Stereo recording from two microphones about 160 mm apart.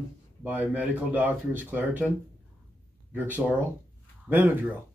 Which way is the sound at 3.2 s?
10° right (ahead or behind).